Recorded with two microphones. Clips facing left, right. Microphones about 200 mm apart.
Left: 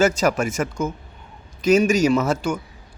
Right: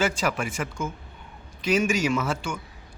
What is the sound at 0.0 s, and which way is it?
Speech, 45° left (ahead or behind).